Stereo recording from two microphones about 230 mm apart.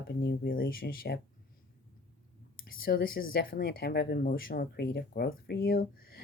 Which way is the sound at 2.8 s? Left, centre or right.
Left.